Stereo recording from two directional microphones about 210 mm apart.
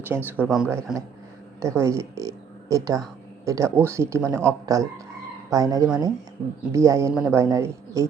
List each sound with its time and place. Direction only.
0.1 s a man's voice: 10° right (ahead or behind)
1.6 s a woman's voice: 15° right (ahead or behind)